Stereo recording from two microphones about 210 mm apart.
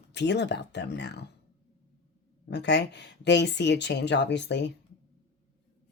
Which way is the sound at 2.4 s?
55° left (ahead or behind).